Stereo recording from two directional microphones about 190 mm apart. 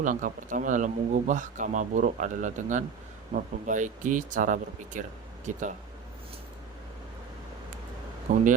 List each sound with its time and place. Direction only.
0.0 s speech: 45° right (ahead or behind)
8.3 s speech: 40° right (ahead or behind)